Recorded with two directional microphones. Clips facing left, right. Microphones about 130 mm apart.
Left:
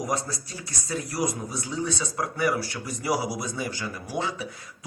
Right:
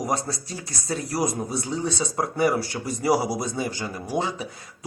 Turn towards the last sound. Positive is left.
turn(degrees=-25)  # may be behind; listen again after turning